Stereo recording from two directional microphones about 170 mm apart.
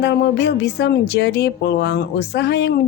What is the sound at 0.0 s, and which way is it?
A woman's voice, 85° left.